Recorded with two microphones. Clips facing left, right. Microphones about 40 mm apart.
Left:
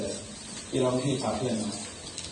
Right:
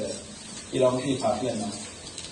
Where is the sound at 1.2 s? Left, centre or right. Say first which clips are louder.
Right 3 dB; centre.